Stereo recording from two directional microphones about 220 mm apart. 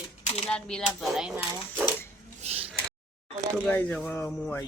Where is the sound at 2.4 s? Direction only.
30° right (ahead or behind).